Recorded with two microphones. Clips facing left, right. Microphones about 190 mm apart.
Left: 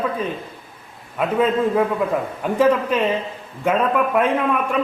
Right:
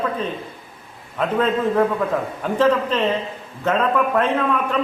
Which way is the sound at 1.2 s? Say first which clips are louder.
Left 1 dB; 10° left (ahead or behind).